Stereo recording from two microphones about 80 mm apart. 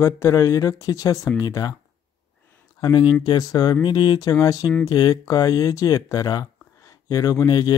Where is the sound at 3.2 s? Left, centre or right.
Left.